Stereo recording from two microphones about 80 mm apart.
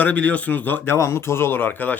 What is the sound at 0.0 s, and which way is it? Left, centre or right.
Speech, centre.